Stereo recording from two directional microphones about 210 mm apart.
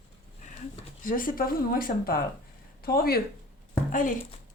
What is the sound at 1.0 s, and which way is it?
Speech, 40° left (ahead or behind).